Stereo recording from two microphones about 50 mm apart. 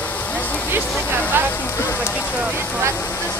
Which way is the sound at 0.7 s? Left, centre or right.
Right.